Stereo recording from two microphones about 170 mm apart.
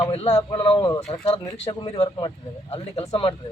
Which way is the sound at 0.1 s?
40° left (ahead or behind).